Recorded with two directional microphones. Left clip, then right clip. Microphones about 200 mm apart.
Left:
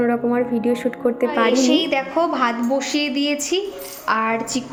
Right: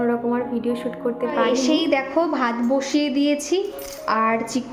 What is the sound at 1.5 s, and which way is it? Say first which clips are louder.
A woman's voice: left 2 dB; 10° right (ahead or behind).